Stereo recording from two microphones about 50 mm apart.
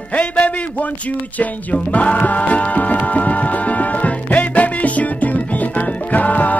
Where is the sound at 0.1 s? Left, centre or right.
Left.